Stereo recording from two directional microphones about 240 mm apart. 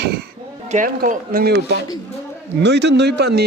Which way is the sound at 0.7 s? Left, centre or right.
Right.